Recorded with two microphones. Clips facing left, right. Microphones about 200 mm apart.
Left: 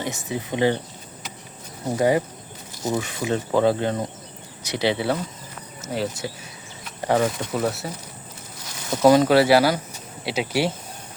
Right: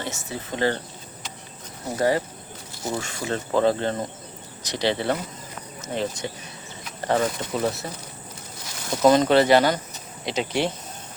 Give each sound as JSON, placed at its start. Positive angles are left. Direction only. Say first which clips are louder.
{"t": 0.0, "sound": "speech", "louder": "left 4 dB", "side_deg": 15}
{"t": 2.0, "sound": "speech", "louder": "left 2 dB", "side_deg": 15}
{"t": 8.9, "sound": "speech", "louder": "left 2 dB", "side_deg": 5}